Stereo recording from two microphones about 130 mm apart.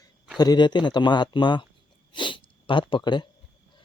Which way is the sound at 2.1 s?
40° left (ahead or behind).